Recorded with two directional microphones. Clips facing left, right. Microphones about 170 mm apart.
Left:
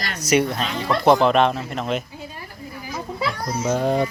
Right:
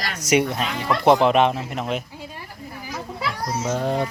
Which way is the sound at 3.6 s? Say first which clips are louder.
Left 4 dB; 5° left (ahead or behind).